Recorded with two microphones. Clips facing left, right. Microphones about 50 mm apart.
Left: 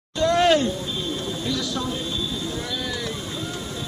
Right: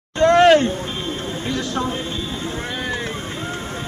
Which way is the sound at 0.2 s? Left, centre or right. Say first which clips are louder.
Right 6 dB; right.